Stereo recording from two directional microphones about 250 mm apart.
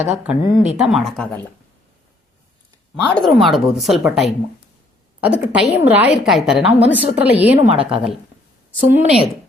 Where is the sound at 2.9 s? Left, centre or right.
Centre.